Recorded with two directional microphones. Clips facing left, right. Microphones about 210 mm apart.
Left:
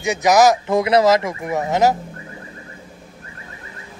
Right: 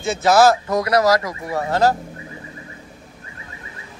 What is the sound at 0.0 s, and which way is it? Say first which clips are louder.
Speech: even; 15° left (ahead or behind).